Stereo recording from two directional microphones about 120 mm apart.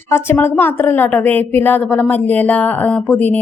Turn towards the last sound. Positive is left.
turn(degrees=10)  # may be behind; listen again after turning